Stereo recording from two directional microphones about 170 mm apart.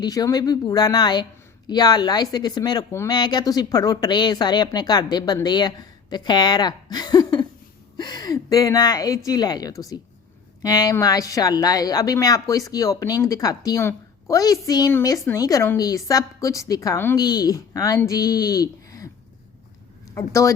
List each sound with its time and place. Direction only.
0.0 s a woman's voice: 25° left (ahead or behind)
20.1 s speech: 20° left (ahead or behind)